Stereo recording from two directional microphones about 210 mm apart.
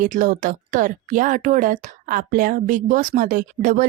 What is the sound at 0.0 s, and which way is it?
Speech, 40° right (ahead or behind).